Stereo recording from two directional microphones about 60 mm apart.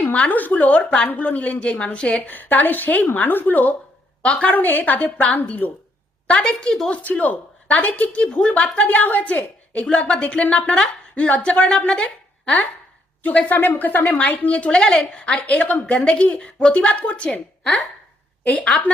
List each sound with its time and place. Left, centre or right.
0.0 s speech: left
2.2 s speech: left
6.3 s a woman's voice: centre
6.9 s speech: left
8.9 s a woman's voice: left